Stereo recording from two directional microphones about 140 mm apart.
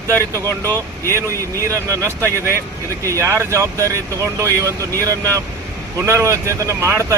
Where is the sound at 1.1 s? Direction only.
20° right (ahead or behind).